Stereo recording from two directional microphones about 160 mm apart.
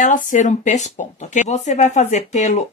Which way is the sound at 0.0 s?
55° left (ahead or behind).